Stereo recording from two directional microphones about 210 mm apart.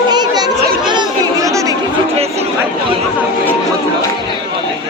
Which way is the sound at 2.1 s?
30° right (ahead or behind).